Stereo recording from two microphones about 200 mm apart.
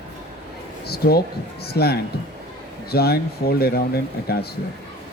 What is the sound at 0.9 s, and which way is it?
A man's voice, 50° left (ahead or behind).